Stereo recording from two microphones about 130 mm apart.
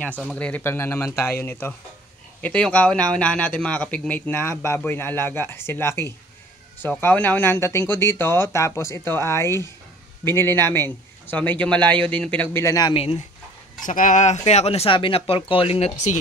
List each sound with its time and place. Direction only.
0.2 s a man's voice: 10° left (ahead or behind)
12.7 s speech: 35° left (ahead or behind)
13.8 s speech: 85° left; by 15.9 s 45° left (ahead or behind)